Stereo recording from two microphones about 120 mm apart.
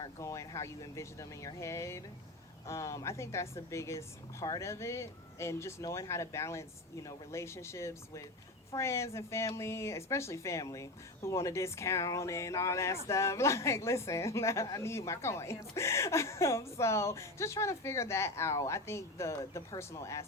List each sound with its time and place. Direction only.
0.0 s a woman's voice: 25° left (ahead or behind)